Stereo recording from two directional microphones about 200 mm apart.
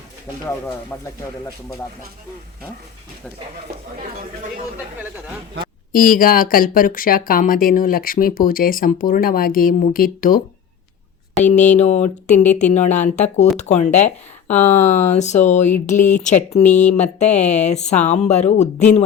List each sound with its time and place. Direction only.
0.9 s speech: 15° left (ahead or behind)
5.9 s speech: 45° left (ahead or behind)
11.4 s a sound: 35° left (ahead or behind)